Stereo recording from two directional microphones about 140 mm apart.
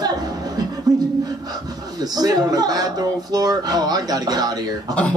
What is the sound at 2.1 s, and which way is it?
A man's voice, 30° right (ahead or behind).